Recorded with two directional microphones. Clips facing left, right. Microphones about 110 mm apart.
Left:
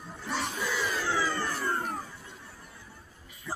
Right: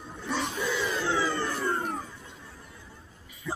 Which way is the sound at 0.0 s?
20° right (ahead or behind).